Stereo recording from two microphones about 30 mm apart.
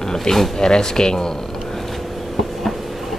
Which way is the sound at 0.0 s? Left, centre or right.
Centre.